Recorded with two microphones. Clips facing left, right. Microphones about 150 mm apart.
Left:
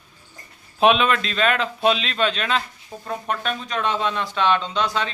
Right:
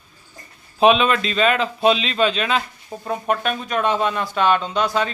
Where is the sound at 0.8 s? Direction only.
Centre (ahead or behind).